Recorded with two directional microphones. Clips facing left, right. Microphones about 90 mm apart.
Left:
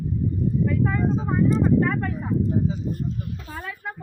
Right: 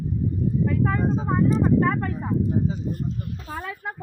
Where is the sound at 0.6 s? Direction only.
40° right (ahead or behind).